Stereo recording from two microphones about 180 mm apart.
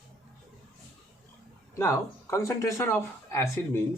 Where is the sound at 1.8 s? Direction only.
15° left (ahead or behind).